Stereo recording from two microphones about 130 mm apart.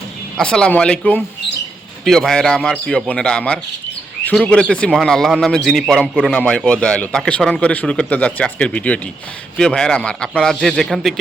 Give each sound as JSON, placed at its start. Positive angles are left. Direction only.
{"t": 0.3, "sound": "a man's voice", "side_deg": 5}